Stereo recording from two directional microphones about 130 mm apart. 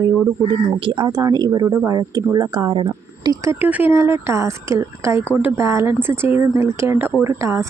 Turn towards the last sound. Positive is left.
turn(degrees=-25)  # may be behind; listen again after turning